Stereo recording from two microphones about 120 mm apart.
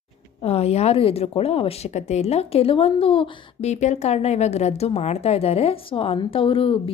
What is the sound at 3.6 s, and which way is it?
A woman's voice, 75° left (ahead or behind).